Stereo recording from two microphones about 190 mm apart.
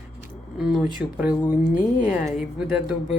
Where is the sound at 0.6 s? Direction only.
5° right (ahead or behind).